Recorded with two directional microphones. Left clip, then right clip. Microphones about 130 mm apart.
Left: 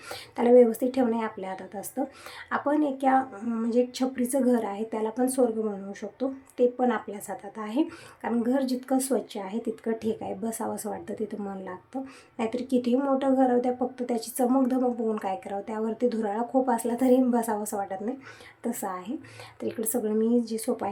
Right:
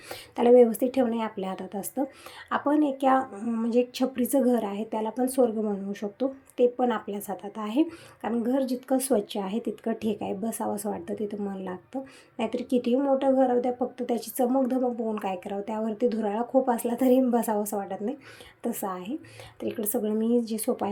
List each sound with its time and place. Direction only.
0.1 s speech: 15° right (ahead or behind)
8.3 s a woman's voice: centre (ahead or behind)
9.0 s a woman's voice: 15° right (ahead or behind)
14.8 s a woman's voice: centre (ahead or behind)
15.2 s speech: 10° right (ahead or behind)